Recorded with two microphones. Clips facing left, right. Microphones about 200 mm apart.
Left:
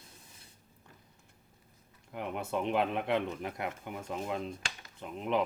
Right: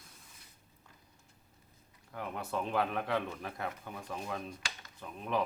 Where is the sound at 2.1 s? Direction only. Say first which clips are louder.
Left 3 dB; 20° left (ahead or behind).